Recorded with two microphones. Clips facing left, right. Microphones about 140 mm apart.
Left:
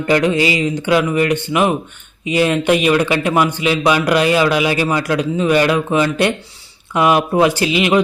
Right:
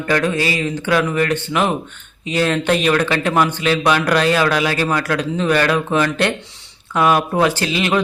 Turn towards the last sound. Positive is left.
turn(degrees=15)  # may be behind; listen again after turning